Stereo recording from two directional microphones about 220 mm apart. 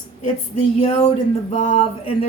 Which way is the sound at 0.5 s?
25° left (ahead or behind).